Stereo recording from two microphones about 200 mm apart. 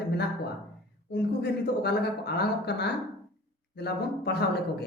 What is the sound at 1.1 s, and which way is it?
Speech, 55° left (ahead or behind).